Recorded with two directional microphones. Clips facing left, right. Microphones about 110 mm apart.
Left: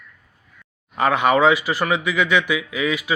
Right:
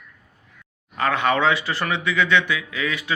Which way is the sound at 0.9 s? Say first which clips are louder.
Left 4 dB; 15° left (ahead or behind).